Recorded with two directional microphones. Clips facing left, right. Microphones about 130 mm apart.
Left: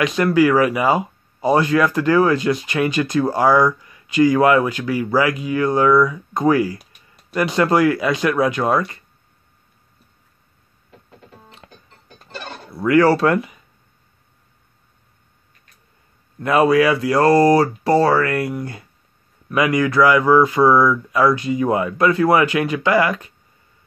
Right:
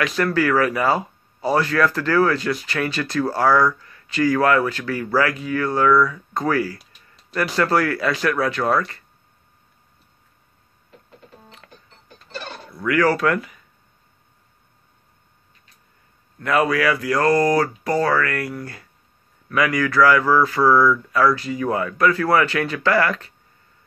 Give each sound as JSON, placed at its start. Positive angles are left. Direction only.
{"t": 0.0, "sound": "speech", "side_deg": 20}
{"t": 6.8, "sound": "a sound", "side_deg": 55}
{"t": 7.3, "sound": "speech", "side_deg": 20}
{"t": 12.7, "sound": "speech", "side_deg": 30}
{"t": 16.3, "sound": "speech", "side_deg": 25}